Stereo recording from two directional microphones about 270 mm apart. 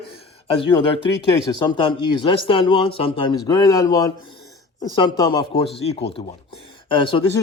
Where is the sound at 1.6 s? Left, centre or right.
Centre.